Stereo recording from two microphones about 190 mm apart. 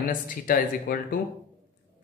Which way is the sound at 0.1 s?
45° left (ahead or behind).